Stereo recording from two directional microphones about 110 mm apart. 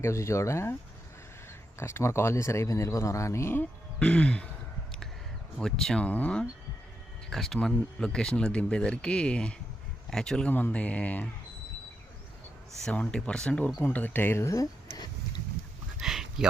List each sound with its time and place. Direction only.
0.0 s speech: 25° left (ahead or behind)
1.8 s speech: 25° left (ahead or behind)
5.5 s speech: 5° left (ahead or behind)
12.8 s speech: 10° left (ahead or behind)
13.8 s speech: 15° left (ahead or behind)
16.0 s a sound: 5° right (ahead or behind)